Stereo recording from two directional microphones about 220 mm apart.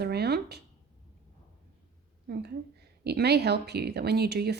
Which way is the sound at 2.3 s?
45° right (ahead or behind).